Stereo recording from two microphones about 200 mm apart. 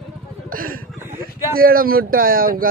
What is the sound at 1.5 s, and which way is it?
Speech, 45° right (ahead or behind).